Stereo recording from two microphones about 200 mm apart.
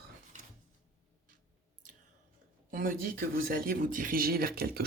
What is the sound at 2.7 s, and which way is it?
Speech, 45° right (ahead or behind).